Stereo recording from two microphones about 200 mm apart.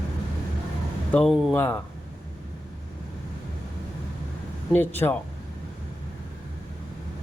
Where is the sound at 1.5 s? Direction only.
10° left (ahead or behind).